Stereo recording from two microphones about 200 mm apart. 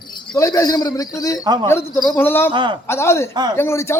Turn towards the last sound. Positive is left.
turn(degrees=15)  # may be behind; listen again after turning